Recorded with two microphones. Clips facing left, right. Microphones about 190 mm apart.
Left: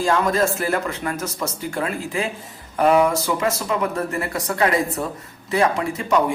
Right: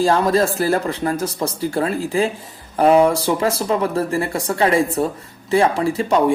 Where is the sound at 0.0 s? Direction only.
35° right (ahead or behind).